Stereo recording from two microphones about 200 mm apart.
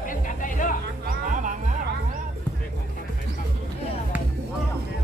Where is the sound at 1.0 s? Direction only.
40° right (ahead or behind).